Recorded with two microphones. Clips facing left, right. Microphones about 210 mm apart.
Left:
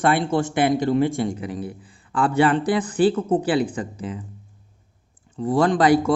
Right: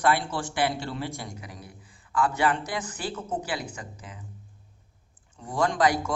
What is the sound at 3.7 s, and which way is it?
Speech, 30° left (ahead or behind).